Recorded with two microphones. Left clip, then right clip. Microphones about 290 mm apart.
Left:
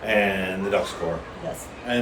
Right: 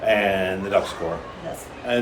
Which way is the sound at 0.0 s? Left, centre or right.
Centre.